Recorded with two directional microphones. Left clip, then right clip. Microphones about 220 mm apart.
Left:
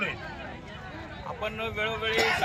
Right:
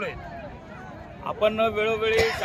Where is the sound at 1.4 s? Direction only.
25° right (ahead or behind).